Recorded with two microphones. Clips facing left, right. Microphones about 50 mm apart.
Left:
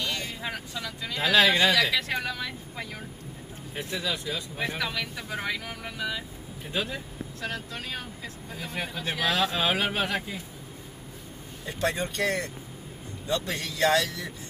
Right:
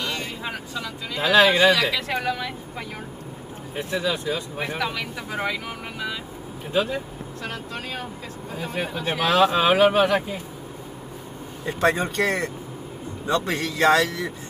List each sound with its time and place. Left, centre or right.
0.0 s speech: right
3.9 s speech: right
11.6 s speech: right
13.5 s speech: right